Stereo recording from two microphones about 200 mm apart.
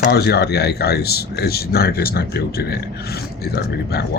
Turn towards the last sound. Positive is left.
turn(degrees=55)  # may be behind; listen again after turning